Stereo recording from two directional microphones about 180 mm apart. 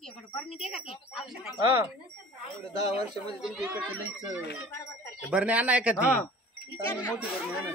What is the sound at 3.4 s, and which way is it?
Speech, 5° right (ahead or behind).